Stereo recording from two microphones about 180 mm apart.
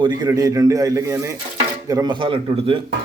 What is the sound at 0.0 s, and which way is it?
A man's voice, 25° right (ahead or behind).